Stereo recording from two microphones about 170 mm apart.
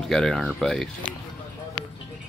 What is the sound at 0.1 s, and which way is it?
Speech, 5° left (ahead or behind).